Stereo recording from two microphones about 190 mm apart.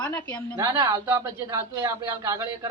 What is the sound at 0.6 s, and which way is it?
A woman's voice, 20° right (ahead or behind).